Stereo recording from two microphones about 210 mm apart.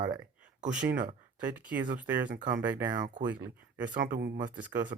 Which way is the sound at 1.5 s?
5° right (ahead or behind).